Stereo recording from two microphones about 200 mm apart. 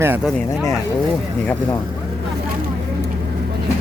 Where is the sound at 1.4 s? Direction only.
10° left (ahead or behind).